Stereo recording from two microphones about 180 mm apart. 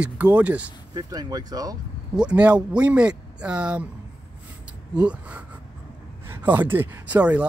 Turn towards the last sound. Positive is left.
turn(degrees=-5)  # may be behind; listen again after turning